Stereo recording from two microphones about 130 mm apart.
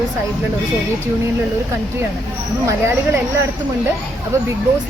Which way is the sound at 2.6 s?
20° right (ahead or behind).